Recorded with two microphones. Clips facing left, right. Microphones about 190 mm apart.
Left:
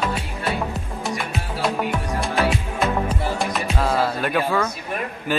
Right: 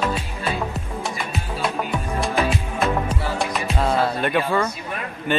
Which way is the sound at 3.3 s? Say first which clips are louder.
Even; centre (ahead or behind).